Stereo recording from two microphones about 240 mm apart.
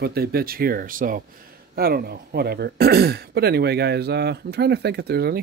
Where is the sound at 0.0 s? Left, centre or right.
Right.